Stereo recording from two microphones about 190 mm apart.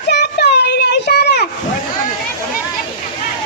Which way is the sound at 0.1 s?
60° left (ahead or behind).